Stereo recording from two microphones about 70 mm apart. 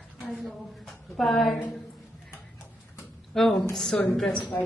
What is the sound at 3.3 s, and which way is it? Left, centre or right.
A woman's voice, centre.